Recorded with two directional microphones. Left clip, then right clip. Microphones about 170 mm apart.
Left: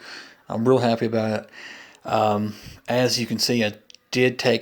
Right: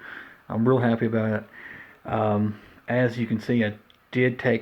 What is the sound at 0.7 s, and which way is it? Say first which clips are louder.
Speech: left 4 dB; 35° left (ahead or behind).